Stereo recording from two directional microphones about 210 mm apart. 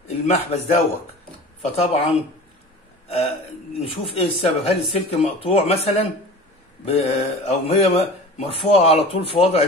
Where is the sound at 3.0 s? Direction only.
30° left (ahead or behind).